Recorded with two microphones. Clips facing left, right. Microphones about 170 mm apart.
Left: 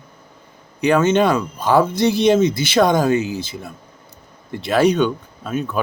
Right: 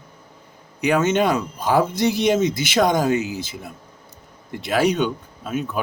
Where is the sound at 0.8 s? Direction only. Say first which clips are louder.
Left 3 dB; 15° right (ahead or behind).